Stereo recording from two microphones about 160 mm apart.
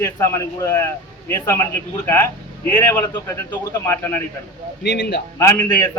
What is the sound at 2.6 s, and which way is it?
A man's voice, 15° left (ahead or behind).